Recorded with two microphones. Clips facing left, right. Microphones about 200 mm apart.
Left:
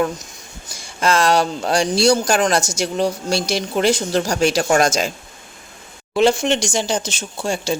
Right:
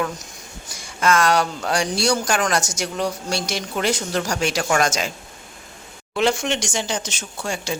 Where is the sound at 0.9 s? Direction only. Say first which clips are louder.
Left 2 dB; 30° left (ahead or behind).